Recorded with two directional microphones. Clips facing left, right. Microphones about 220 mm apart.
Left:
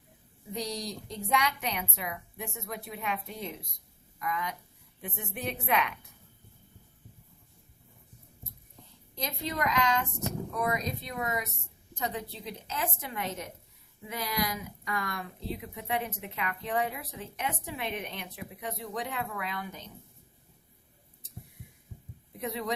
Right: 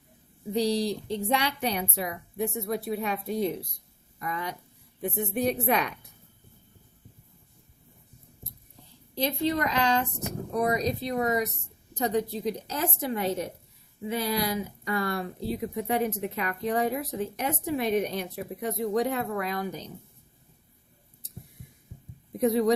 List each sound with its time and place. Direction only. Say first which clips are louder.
0.5 s speech: right 10 dB; 30° right (ahead or behind)
9.1 s speech: right 8 dB; 35° right (ahead or behind)
22.3 s a man's voice: right 12 dB; 40° right (ahead or behind)